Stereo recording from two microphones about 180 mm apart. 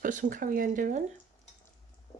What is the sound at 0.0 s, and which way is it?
Speech, 45° right (ahead or behind).